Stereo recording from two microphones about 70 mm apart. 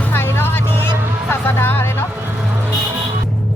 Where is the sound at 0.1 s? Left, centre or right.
Left.